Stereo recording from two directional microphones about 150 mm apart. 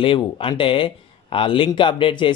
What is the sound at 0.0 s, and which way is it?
A man's voice, 35° left (ahead or behind).